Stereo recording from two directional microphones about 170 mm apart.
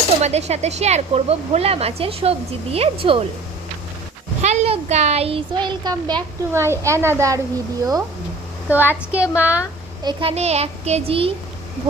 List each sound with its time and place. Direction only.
0.2 s speech: 40° right (ahead or behind)
4.4 s speech: 40° right (ahead or behind); by 9.6 s 10° right (ahead or behind)
10.0 s speech: 30° right (ahead or behind)